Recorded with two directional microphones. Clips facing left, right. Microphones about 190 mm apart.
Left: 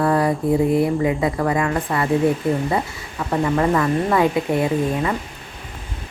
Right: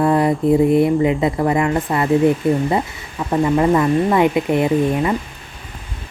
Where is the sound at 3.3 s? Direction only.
20° right (ahead or behind).